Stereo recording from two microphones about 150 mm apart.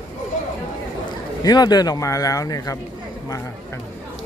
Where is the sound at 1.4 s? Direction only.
25° left (ahead or behind).